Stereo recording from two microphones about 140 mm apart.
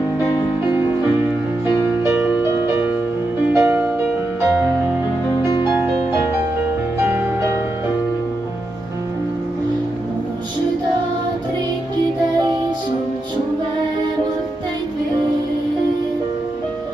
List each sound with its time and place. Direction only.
2.0 s music: 15° right (ahead or behind)
5.7 s music: 20° right (ahead or behind)